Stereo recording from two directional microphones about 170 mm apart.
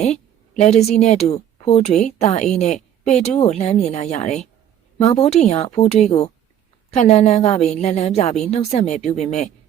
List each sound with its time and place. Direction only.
0.5 s a woman's voice: 40° left (ahead or behind)